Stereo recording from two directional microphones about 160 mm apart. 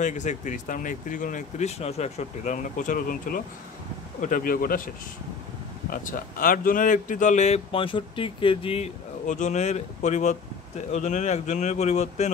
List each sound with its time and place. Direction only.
0.0 s speech: 50° left (ahead or behind); by 8.8 s 35° left (ahead or behind)
9.3 s speech: 50° left (ahead or behind)